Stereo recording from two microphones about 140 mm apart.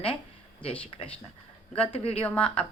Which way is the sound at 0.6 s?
40° left (ahead or behind).